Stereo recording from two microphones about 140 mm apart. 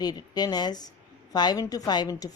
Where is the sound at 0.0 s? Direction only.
30° left (ahead or behind).